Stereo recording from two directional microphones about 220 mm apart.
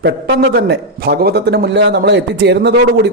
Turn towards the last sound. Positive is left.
turn(degrees=-50)  # may be behind; listen again after turning